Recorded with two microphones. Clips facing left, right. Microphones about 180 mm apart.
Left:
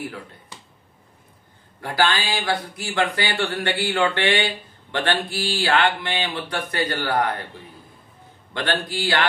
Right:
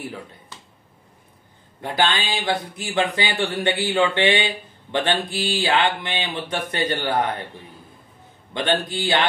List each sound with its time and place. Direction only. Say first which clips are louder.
1.8 s speech: even; 20° right (ahead or behind)
8.5 s speech: right 2 dB; 20° right (ahead or behind)